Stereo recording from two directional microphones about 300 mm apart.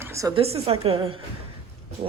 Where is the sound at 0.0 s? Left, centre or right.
Centre.